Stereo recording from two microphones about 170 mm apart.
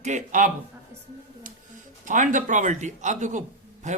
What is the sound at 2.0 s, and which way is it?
Speech, 50° right (ahead or behind).